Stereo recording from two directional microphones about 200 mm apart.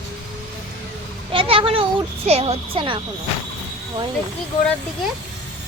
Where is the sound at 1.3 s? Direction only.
25° right (ahead or behind).